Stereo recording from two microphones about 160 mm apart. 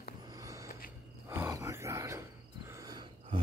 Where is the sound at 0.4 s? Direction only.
20° right (ahead or behind).